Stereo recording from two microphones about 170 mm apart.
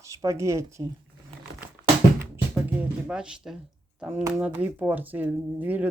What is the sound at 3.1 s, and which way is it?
Speech, 5° right (ahead or behind).